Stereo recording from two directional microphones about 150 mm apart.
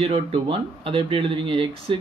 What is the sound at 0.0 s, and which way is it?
Speech, 40° right (ahead or behind).